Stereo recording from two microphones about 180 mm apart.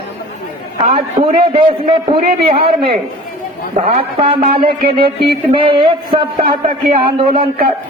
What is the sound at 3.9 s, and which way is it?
Speech, 30° right (ahead or behind).